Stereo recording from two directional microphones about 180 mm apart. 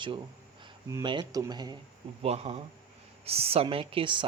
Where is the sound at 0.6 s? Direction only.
20° right (ahead or behind).